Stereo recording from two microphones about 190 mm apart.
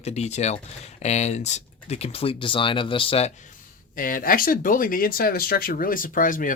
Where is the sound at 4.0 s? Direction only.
50° left (ahead or behind).